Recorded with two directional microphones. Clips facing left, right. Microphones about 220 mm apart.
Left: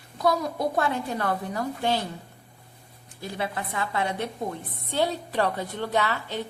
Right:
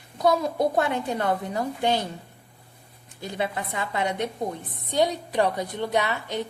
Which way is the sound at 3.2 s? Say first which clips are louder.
Right 2 dB; 20° right (ahead or behind).